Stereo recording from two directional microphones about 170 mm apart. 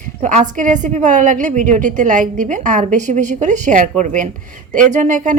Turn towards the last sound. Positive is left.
turn(degrees=-45)  # may be behind; listen again after turning